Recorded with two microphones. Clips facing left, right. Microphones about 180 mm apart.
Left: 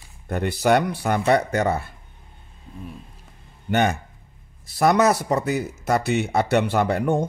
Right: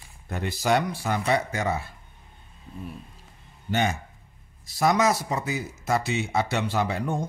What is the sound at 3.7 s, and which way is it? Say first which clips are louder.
Speech: left 5 dB; 60° left (ahead or behind).